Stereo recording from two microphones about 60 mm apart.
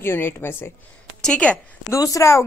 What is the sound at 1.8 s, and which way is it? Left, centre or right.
Speech, left.